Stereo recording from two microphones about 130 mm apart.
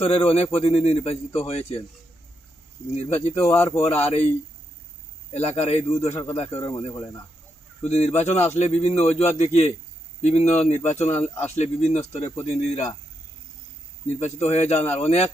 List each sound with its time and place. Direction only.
0.0 s speech: 45° left (ahead or behind)
2.9 s a man's voice: 55° left (ahead or behind)
3.4 s speech: 20° left (ahead or behind)
3.8 s speech: 50° left (ahead or behind)
5.3 s a man's voice: 55° left (ahead or behind)
6.7 s speech: 35° left (ahead or behind)
7.8 s a man's voice: 55° left (ahead or behind)
14.2 s a man's voice: 55° left (ahead or behind)